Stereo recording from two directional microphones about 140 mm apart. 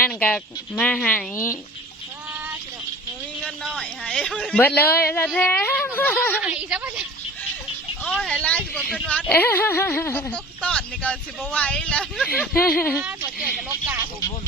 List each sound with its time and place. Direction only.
0.2 s speech: 10° left (ahead or behind)
3.4 s a sound: 5° left (ahead or behind)
5.0 s speech: 15° left (ahead or behind)
6.4 s speech: 10° right (ahead or behind)
8.0 s speech: 5° left (ahead or behind)
12.7 s speech: 5° left (ahead or behind)
13.0 s speech: 10° right (ahead or behind)